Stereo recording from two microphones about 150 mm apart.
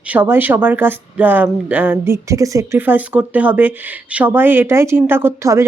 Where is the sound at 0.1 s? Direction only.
15° right (ahead or behind).